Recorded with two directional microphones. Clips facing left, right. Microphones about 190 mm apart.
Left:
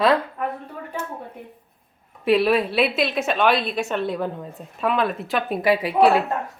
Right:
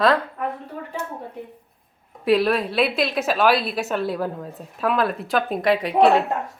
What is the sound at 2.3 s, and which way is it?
A woman's voice, 5° left (ahead or behind).